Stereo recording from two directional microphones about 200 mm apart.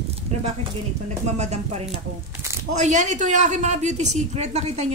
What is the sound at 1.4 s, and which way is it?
Speech, 35° right (ahead or behind).